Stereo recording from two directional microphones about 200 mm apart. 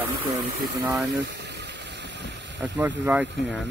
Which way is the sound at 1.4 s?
60° right (ahead or behind).